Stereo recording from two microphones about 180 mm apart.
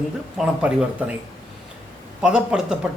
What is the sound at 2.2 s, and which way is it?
Speech, 5° right (ahead or behind).